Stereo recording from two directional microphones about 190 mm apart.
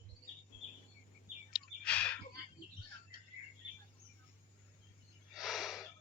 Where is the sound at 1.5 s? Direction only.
5° left (ahead or behind).